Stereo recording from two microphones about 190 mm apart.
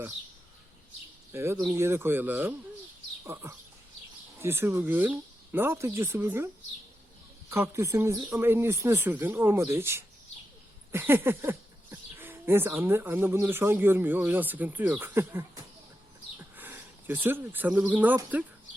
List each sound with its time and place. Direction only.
1.3 s speech: 15° right (ahead or behind)
7.5 s speech: 15° right (ahead or behind)
16.6 s speech: 10° right (ahead or behind)